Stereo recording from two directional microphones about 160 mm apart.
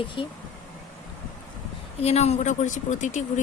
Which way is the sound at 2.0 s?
40° left (ahead or behind).